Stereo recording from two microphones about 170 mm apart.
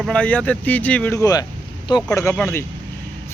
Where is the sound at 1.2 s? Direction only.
20° left (ahead or behind).